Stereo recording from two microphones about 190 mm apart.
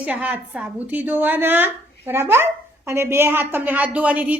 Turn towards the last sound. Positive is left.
turn(degrees=-10)  # may be behind; listen again after turning